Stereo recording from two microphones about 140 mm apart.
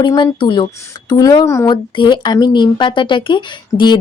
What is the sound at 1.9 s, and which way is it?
Speech, 35° left (ahead or behind).